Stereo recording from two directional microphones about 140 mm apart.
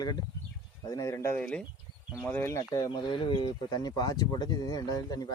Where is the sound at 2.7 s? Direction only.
25° left (ahead or behind).